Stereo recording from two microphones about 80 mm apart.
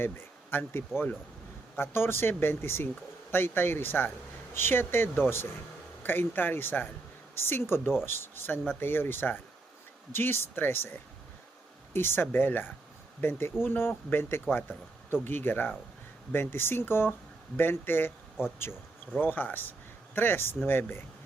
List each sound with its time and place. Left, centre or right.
0.0 s speech: left
11.9 s speech: left
19.1 s speech: left